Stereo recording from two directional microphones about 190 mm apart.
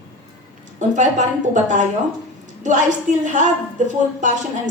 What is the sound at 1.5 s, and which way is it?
Speech, 40° right (ahead or behind).